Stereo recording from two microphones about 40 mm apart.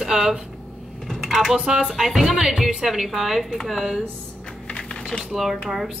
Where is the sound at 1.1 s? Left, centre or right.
Centre.